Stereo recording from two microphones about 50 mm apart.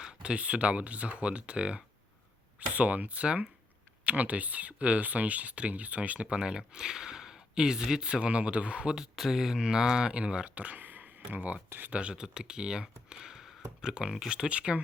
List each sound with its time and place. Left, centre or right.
0.1 s speech: right
6.2 s speech: centre
9.0 s speech: centre; by 14.8 s right